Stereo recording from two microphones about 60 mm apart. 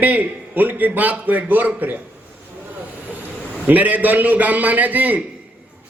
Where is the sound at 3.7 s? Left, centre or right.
Right.